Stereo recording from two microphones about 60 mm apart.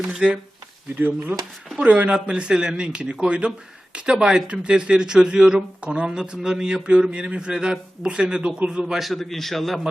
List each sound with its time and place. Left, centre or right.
0.2 s speech: centre
1.8 s speech: right; by 9.8 s centre